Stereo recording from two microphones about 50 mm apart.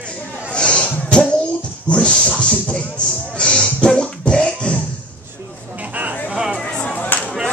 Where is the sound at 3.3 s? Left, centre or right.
Centre.